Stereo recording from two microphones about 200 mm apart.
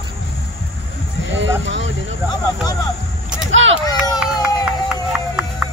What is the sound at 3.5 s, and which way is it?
Speech, 70° right (ahead or behind).